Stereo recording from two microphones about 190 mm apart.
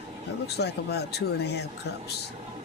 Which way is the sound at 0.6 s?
60° left (ahead or behind).